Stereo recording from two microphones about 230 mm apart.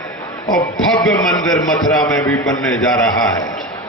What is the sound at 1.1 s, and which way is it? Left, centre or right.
Speech, centre.